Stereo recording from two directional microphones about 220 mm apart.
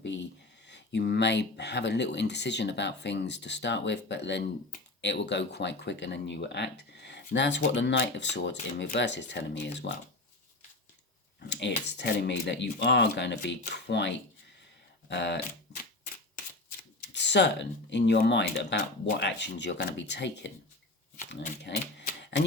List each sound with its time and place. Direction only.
0.0 s a sound: 55° left (ahead or behind)
0.7 s speech: 50° left (ahead or behind)
11.3 s speech: 50° left (ahead or behind)
15.1 s speech: 50° left (ahead or behind)
17.1 s speech: 50° left (ahead or behind)
21.6 s speech: 50° left (ahead or behind)